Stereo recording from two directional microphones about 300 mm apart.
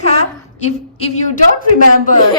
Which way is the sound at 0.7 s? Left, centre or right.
Left.